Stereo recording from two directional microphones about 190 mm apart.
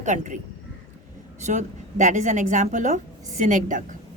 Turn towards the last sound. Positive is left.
turn(degrees=-45)  # may be behind; listen again after turning